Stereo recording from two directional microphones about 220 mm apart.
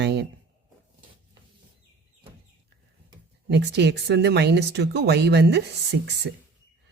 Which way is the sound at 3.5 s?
50° right (ahead or behind).